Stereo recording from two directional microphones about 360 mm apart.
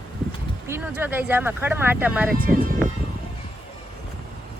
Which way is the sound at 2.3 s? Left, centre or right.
Right.